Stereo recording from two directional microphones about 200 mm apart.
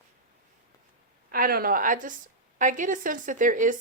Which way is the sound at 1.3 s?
45° right (ahead or behind).